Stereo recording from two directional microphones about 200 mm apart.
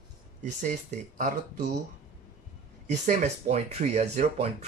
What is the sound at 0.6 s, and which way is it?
Speech, 40° right (ahead or behind).